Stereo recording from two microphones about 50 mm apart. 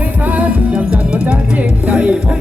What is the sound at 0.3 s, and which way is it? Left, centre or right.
Music, right.